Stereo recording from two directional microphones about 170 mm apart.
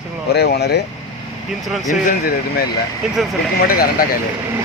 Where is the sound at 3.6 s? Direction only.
60° left (ahead or behind).